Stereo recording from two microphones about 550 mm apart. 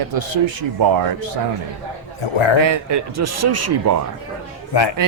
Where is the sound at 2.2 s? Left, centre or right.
Left.